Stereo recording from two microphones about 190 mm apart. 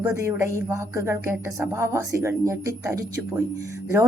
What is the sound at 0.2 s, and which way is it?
Speech, 15° right (ahead or behind).